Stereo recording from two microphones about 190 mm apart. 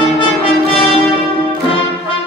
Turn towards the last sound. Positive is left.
turn(degrees=30)  # may be behind; listen again after turning